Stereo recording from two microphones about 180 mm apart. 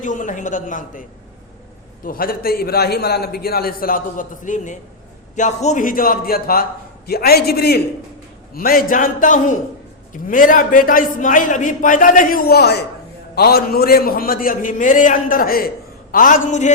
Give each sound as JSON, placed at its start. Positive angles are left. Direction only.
{"t": 0.0, "sound": "a man's voice", "side_deg": 45}
{"t": 2.0, "sound": "a man's voice", "side_deg": 55}